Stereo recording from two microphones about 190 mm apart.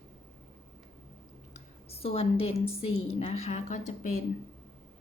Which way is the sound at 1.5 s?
30° left (ahead or behind).